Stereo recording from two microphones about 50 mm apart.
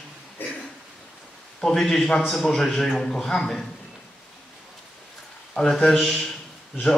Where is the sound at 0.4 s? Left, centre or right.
Left.